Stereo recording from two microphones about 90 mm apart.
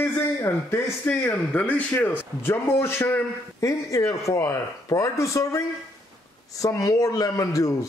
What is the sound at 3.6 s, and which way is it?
A man's voice, 35° left (ahead or behind).